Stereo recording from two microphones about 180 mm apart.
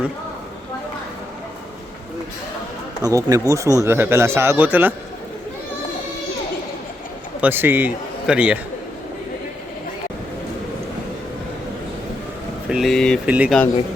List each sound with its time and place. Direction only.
3.0 s speech: 20° right (ahead or behind)
7.4 s speech: 10° right (ahead or behind)
12.7 s speech: centre (ahead or behind)